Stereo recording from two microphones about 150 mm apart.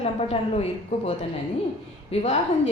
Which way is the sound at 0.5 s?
45° left (ahead or behind).